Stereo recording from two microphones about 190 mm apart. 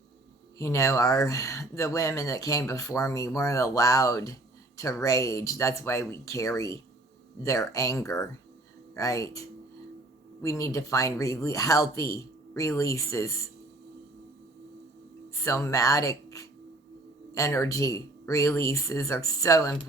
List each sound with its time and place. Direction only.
0.6 s speech: 15° left (ahead or behind)
10.4 s speech: 15° left (ahead or behind)
15.4 s speech: 15° left (ahead or behind)